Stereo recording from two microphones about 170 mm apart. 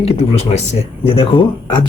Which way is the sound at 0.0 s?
40° left (ahead or behind).